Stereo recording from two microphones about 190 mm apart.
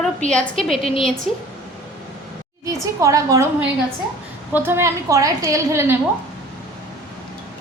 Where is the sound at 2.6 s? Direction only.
15° right (ahead or behind).